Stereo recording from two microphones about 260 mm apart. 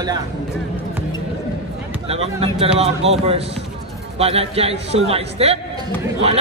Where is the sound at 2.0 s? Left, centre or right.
Right.